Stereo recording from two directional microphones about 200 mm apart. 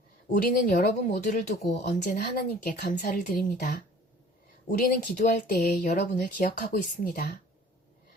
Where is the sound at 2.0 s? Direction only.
50° left (ahead or behind).